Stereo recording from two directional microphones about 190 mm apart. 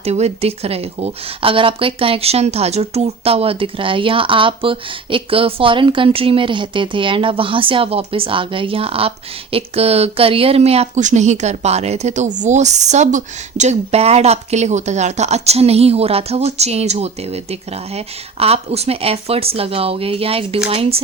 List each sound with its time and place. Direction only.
0.0 s speech: 35° right (ahead or behind)